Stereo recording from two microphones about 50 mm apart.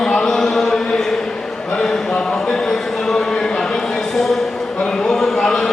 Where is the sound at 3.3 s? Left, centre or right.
Centre.